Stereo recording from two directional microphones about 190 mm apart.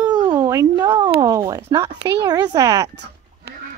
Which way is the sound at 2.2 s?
20° right (ahead or behind).